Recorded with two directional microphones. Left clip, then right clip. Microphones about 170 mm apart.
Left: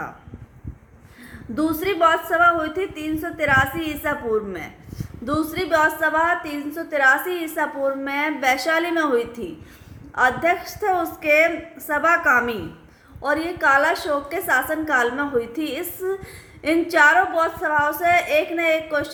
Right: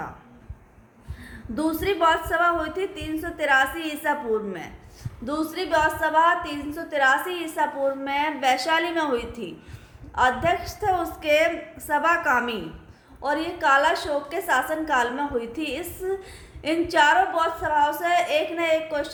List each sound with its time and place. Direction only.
1.5 s a woman's voice: 60° left (ahead or behind)